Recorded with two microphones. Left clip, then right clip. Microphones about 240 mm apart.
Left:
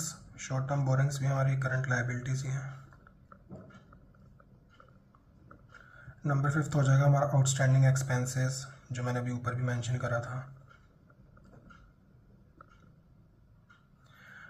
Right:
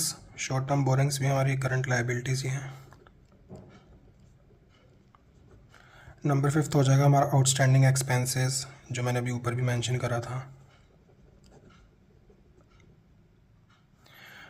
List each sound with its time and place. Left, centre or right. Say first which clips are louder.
0.4 s a man's voice: right 6 dB; right
6.0 s a sound: right 5 dB; right
6.5 s a man's voice: right 5 dB; right
14.2 s gasp: right 3 dB; right